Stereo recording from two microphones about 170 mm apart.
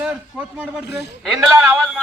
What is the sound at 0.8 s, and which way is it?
Speech, 80° left.